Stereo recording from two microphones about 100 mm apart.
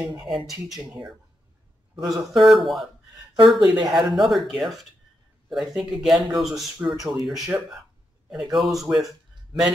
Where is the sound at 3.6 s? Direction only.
45° right (ahead or behind).